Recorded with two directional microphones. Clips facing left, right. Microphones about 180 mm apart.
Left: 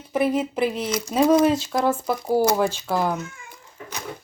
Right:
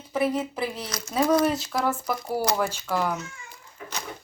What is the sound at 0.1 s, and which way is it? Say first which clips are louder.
Speech: left 3 dB; 20° left (ahead or behind).